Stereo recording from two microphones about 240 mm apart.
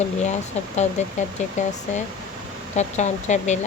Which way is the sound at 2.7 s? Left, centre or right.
Left.